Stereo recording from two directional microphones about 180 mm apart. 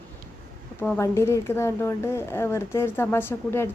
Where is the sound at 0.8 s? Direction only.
10° left (ahead or behind).